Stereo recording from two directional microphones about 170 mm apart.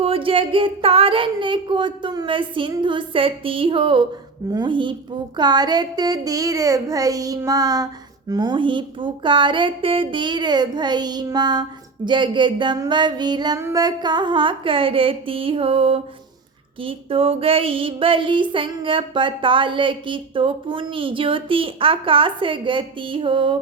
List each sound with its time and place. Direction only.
0.0 s a woman's voice: 30° right (ahead or behind)